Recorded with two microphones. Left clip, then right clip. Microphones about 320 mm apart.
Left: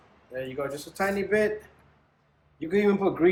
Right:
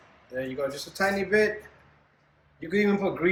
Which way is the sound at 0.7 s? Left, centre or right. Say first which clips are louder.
Right 1 dB; centre.